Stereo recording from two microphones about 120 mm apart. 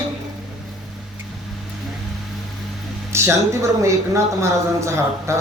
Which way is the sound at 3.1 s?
20° right (ahead or behind).